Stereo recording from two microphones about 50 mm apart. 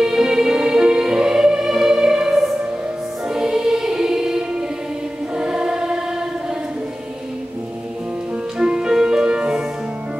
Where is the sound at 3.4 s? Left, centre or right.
Centre.